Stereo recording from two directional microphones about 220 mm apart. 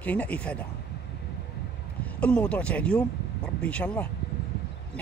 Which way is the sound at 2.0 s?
5° left (ahead or behind).